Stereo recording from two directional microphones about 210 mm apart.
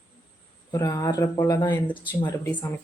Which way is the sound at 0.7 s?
15° left (ahead or behind).